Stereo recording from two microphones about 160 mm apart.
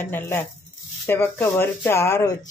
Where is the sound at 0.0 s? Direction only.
15° left (ahead or behind).